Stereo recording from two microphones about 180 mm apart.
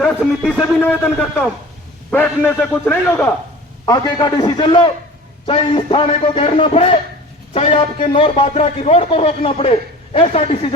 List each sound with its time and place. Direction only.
0.0 s a man's voice: centre (ahead or behind)
3.8 s a man's voice: 20° left (ahead or behind)